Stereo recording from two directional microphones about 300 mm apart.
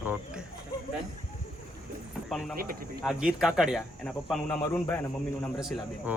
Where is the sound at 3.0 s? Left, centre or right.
Centre.